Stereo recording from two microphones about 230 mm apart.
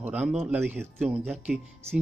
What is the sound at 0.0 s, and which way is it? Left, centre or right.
Speech, centre.